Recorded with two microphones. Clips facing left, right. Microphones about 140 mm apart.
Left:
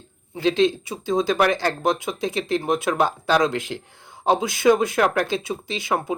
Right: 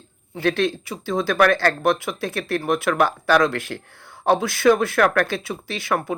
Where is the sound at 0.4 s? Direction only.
20° left (ahead or behind).